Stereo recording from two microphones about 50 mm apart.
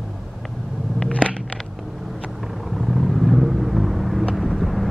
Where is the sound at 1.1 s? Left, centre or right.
Left.